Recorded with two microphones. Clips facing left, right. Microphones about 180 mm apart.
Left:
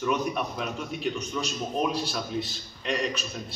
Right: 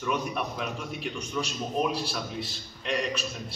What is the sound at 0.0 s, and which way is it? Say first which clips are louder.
A man's voice: left 3 dB; centre (ahead or behind).